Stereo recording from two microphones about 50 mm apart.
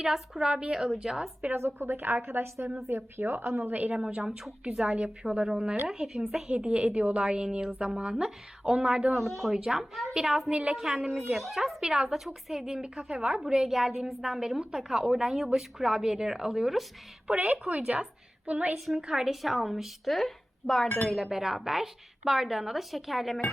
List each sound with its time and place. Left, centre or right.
0.0 s speech: centre
1.5 s a woman's voice: right
3.7 s a woman's voice: right
3.9 s a woman's voice: centre
4.3 s speech: centre
4.9 s a woman's voice: right; by 10.5 s centre
10.5 s a woman's voice: right
10.8 s speech: centre
13.0 s a woman's voice: right
13.7 s speech: centre
17.3 s a woman's voice: right
18.9 s speech: centre